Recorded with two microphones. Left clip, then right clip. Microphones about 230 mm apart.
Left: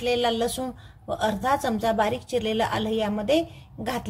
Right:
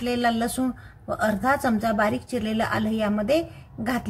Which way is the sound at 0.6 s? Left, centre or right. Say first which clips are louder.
Right 4 dB; left.